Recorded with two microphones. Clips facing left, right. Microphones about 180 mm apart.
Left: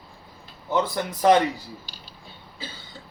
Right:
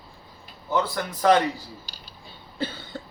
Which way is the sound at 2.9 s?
65° right (ahead or behind).